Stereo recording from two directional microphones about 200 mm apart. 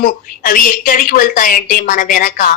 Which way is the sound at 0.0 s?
45° left (ahead or behind).